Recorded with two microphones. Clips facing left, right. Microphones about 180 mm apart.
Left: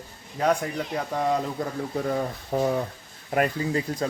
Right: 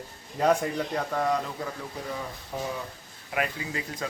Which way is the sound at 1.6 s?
45° left (ahead or behind).